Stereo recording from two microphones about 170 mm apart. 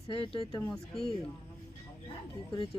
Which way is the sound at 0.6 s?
10° left (ahead or behind).